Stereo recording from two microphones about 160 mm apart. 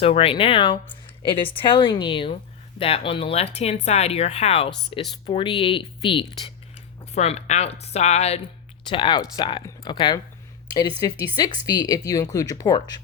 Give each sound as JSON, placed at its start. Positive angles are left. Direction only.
{"t": 0.0, "sound": "speech", "side_deg": 35}
{"t": 7.1, "sound": "speech", "side_deg": 40}
{"t": 8.9, "sound": "speech", "side_deg": 30}